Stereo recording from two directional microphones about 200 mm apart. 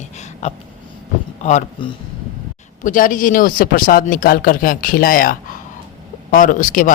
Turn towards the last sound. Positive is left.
turn(degrees=40)  # may be behind; listen again after turning